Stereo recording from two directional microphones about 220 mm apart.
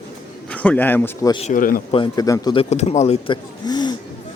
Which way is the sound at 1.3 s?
30° left (ahead or behind).